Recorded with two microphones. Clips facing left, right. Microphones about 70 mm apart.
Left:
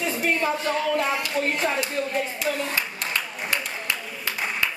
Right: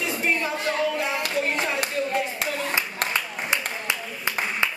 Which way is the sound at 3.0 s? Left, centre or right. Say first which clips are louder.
Right 3 dB; right.